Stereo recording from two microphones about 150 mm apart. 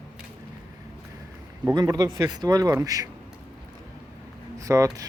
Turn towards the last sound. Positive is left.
turn(degrees=-20)  # may be behind; listen again after turning